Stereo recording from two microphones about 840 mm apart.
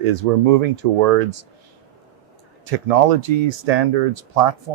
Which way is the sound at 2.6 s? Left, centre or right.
Right.